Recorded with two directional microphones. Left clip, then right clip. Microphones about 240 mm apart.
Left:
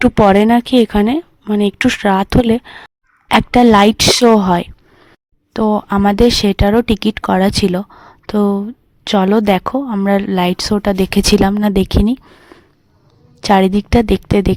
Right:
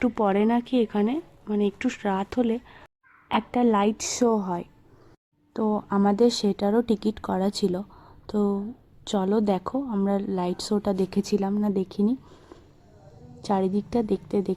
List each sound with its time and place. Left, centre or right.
0.0 s speech: left
4.3 s a woman's voice: left
5.7 s speech: left